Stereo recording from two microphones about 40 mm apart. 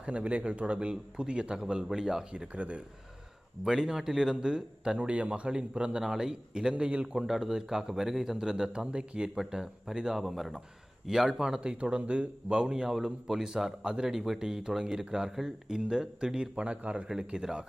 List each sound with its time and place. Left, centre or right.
0.0 s a man's voice: right; by 2.2 s centre
2.3 s speech: right
3.6 s speech: centre
4.9 s a man's voice: right
6.0 s a man's voice: centre
7.2 s speech: centre
10.2 s a man's voice: centre
11.8 s a man's voice: right
17.1 s speech: centre